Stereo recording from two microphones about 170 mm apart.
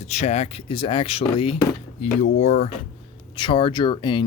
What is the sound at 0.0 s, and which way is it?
Speech, 40° left (ahead or behind).